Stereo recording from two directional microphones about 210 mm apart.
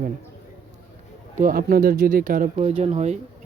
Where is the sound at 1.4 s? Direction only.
45° right (ahead or behind).